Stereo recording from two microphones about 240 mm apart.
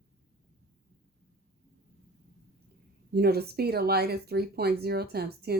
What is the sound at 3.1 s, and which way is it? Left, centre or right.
Speech, right.